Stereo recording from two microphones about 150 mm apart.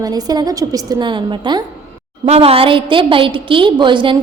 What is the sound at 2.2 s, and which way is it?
A woman's voice, 45° right (ahead or behind).